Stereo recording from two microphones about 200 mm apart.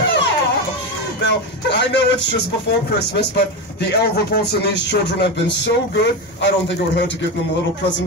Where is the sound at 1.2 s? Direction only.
60° left (ahead or behind).